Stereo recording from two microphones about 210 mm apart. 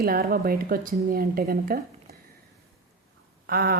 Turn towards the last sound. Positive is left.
turn(degrees=-45)  # may be behind; listen again after turning